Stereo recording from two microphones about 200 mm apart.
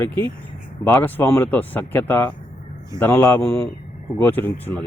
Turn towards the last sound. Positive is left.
turn(degrees=10)  # may be behind; listen again after turning